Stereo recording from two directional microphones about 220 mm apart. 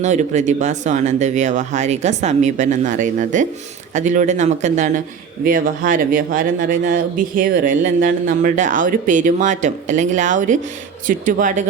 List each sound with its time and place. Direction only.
0.0 s a man's voice: 30° right (ahead or behind)